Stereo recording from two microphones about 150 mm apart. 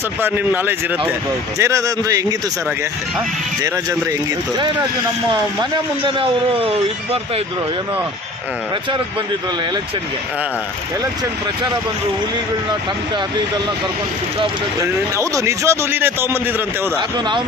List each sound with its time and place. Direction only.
0.2 s a man's voice: 15° right (ahead or behind)
3.6 s a man's voice: 25° right (ahead or behind)
6.1 s speech: 35° right (ahead or behind)
15.1 s a man's voice: 20° right (ahead or behind)
17.0 s speech: 30° right (ahead or behind)